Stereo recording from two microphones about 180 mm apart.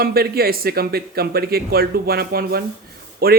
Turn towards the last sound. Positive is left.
turn(degrees=-55)  # may be behind; listen again after turning